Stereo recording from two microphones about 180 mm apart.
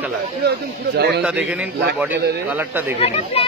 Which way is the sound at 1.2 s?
5° right (ahead or behind).